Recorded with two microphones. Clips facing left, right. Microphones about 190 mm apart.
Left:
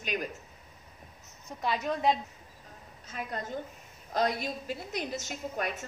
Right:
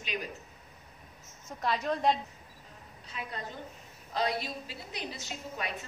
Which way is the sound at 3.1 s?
45° left (ahead or behind).